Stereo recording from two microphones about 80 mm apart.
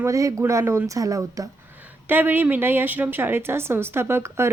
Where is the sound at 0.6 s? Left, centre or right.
Right.